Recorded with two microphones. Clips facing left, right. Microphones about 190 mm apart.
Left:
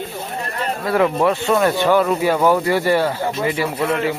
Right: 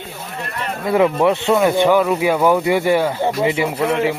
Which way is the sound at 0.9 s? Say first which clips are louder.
Right 2 dB; 15° right (ahead or behind).